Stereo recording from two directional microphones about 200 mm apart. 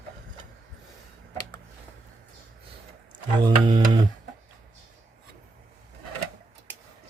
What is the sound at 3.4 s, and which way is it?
Music, 25° right (ahead or behind).